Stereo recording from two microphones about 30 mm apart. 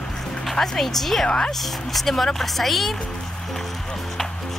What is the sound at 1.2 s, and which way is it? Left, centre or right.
Speech, left.